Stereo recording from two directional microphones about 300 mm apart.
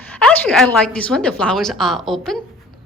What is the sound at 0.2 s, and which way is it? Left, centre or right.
A woman's voice, centre.